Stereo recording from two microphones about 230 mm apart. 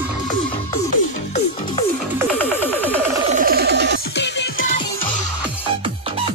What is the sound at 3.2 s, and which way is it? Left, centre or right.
Music, right.